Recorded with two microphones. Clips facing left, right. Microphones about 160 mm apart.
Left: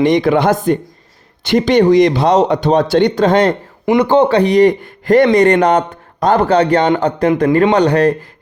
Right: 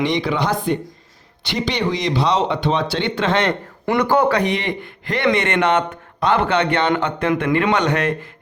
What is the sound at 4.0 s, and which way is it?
Speech, 25° left (ahead or behind).